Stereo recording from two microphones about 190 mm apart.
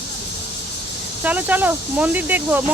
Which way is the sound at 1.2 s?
10° right (ahead or behind).